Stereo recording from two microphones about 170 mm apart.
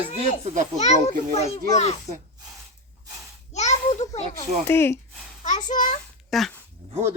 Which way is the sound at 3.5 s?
40° left (ahead or behind).